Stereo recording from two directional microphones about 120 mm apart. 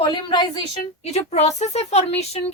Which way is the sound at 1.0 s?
65° left (ahead or behind).